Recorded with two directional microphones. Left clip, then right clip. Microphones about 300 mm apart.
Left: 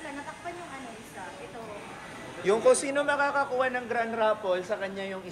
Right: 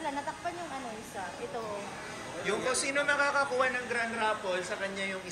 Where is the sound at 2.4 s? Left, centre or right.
Centre.